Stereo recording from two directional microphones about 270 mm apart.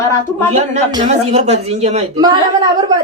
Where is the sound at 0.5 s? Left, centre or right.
Centre.